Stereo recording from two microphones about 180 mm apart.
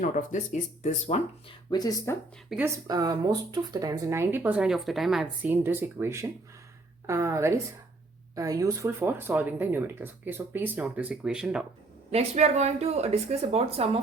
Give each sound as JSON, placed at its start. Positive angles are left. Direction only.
{"t": 0.0, "sound": "speech", "side_deg": 45}
{"t": 1.7, "sound": "speech", "side_deg": 20}
{"t": 2.5, "sound": "speech", "side_deg": -10}
{"t": 12.1, "sound": "speech", "side_deg": -35}